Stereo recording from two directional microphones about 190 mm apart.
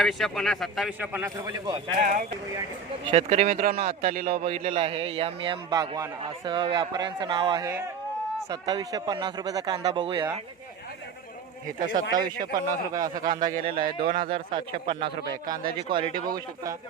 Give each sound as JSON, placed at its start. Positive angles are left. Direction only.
{"t": 0.0, "sound": "speech", "side_deg": 0}
{"t": 1.5, "sound": "a man's voice", "side_deg": -25}
{"t": 3.0, "sound": "speech", "side_deg": -30}
{"t": 4.4, "sound": "a man's voice", "side_deg": -30}
{"t": 11.8, "sound": "speech", "side_deg": -45}
{"t": 12.1, "sound": "a man's voice", "side_deg": -20}
{"t": 13.5, "sound": "a man's voice", "side_deg": -30}